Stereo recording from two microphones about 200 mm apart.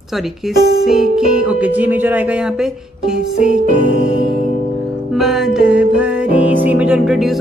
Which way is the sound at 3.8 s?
45° right (ahead or behind).